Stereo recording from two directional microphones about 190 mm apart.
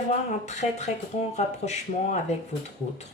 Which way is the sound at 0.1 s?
40° left (ahead or behind).